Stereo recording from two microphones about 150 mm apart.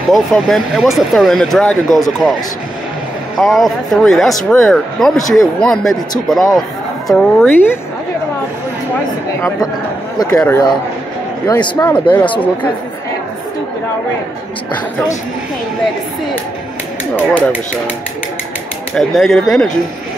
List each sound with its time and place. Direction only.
0.1 s speech: centre (ahead or behind)
3.3 s speech: centre (ahead or behind)
10.1 s speech: 20° left (ahead or behind)
11.7 s speech: 10° left (ahead or behind)
18.9 s speech: 5° left (ahead or behind)